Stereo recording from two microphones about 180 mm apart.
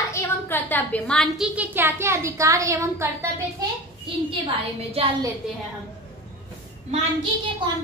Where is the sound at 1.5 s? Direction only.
10° right (ahead or behind).